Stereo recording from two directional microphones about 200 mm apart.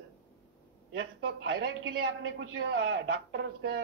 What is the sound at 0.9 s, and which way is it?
A man's voice, 75° right (ahead or behind).